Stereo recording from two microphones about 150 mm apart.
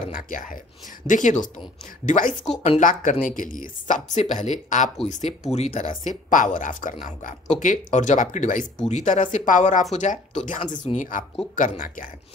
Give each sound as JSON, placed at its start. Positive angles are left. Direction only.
{"t": 0.1, "sound": "speech", "side_deg": 65}